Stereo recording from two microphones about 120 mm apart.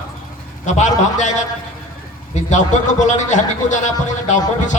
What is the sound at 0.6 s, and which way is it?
A man's voice, 85° left.